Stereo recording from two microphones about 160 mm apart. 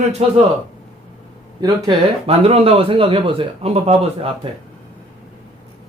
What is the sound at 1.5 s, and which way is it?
Speech, 25° right (ahead or behind).